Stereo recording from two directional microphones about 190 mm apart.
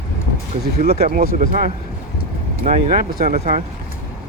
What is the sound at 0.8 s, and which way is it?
Speech, 55° right (ahead or behind).